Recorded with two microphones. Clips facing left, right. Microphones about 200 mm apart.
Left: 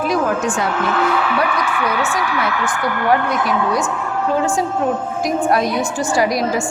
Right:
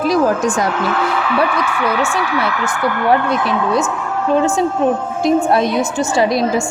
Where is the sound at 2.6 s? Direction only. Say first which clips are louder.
Right 2 dB; 25° right (ahead or behind).